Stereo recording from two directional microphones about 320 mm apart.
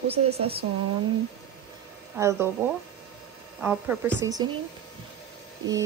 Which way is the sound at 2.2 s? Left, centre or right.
Centre.